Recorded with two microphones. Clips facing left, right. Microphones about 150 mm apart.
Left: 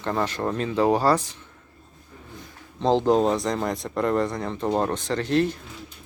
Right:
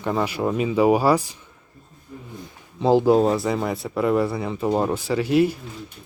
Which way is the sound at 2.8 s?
10° right (ahead or behind).